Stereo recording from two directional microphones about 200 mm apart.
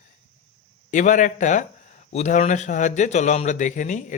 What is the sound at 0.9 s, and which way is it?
Speech, 40° left (ahead or behind).